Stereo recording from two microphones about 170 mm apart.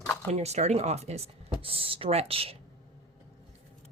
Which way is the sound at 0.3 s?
40° right (ahead or behind).